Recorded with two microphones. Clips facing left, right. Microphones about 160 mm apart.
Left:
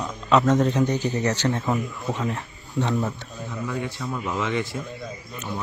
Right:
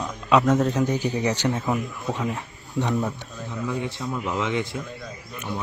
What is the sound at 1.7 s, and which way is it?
Speech, centre (ahead or behind).